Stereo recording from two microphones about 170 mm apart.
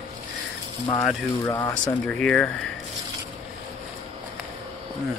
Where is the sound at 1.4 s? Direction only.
20° left (ahead or behind).